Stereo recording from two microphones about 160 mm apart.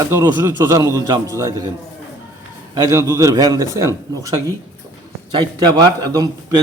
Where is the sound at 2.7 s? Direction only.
20° right (ahead or behind).